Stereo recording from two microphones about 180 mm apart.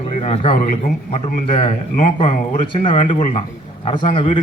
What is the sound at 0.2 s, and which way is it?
Speech, 35° left (ahead or behind).